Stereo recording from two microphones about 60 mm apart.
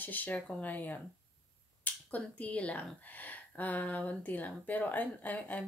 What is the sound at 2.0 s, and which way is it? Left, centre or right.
Speech, left.